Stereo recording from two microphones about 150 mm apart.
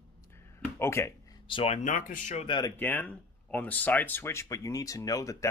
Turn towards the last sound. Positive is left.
turn(degrees=20)  # may be behind; listen again after turning